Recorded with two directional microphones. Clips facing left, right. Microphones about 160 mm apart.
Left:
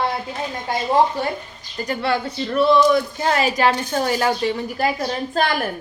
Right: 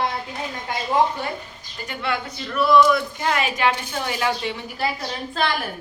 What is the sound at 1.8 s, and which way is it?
A woman's voice, 35° left (ahead or behind).